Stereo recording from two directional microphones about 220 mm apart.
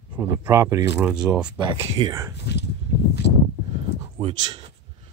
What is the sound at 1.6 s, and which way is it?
Speech, 20° right (ahead or behind).